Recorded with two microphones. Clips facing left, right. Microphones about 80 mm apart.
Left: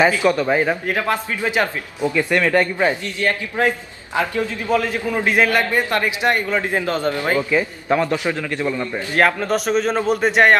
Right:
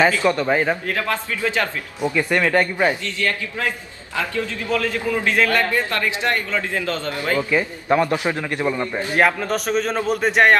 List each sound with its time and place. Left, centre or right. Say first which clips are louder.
0.0 s a man's voice: left 1 dB; centre
0.4 s a man's voice: left 1 dB; centre
0.9 s a man's voice: left 2 dB; centre
2.1 s a man's voice: left 1 dB; centre
3.0 s a man's voice: left 2 dB; left
7.5 s a man's voice: even; centre
8.1 s a man's voice: even; right
9.1 s a man's voice: left 2 dB; centre